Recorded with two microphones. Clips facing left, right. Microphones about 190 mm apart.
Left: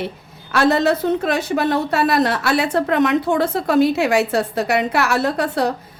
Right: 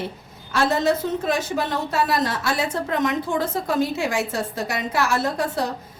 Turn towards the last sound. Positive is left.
turn(degrees=65)  # may be behind; listen again after turning